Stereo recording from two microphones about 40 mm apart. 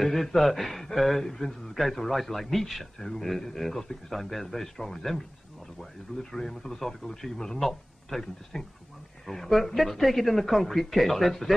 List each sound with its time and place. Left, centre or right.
0.0 s a woman's voice: centre